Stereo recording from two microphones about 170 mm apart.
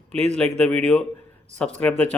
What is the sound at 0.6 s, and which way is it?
Speech, 5° left (ahead or behind).